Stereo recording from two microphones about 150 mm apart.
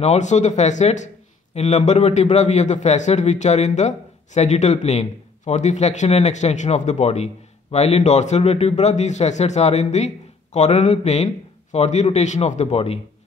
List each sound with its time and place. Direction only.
0.0 s speech: 50° left (ahead or behind)